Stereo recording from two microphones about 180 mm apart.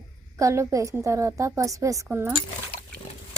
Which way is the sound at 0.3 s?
15° right (ahead or behind).